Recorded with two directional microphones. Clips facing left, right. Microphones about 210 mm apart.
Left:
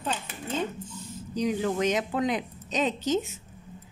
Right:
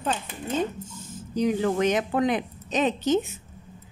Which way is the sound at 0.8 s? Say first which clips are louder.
Even; 50° right (ahead or behind).